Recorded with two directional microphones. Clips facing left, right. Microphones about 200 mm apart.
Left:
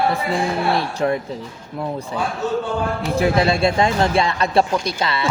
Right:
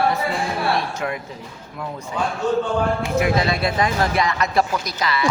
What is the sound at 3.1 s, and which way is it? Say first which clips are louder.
Speech: left 4 dB; 30° left (ahead or behind).